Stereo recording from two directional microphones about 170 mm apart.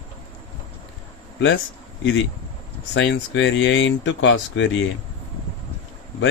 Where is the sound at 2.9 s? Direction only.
90° left.